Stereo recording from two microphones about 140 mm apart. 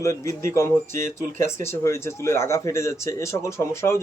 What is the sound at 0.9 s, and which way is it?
Speech, 70° right (ahead or behind).